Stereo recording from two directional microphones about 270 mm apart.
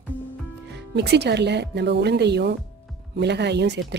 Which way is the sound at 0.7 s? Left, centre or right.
Right.